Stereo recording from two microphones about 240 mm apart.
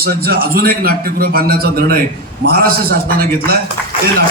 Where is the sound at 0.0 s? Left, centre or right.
Right.